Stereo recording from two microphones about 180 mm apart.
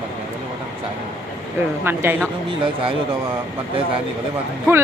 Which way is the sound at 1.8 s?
10° right (ahead or behind).